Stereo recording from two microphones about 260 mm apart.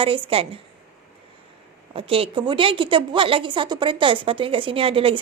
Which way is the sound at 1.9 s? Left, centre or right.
Right.